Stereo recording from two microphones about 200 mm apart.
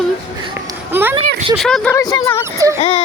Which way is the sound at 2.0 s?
20° left (ahead or behind).